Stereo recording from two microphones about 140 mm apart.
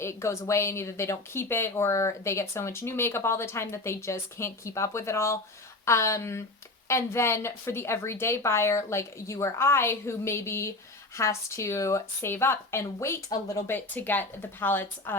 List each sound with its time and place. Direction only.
0.0 s speech: 20° left (ahead or behind)